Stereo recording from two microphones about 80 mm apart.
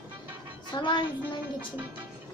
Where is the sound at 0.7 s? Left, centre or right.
Left.